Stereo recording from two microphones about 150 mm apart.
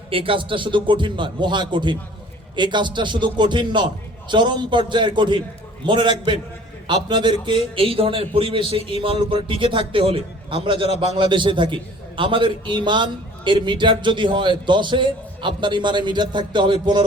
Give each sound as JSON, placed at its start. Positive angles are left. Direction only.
{"t": 0.1, "sound": "a man's voice", "side_deg": -35}